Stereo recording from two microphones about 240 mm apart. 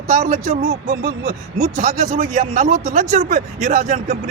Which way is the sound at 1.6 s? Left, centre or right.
Right.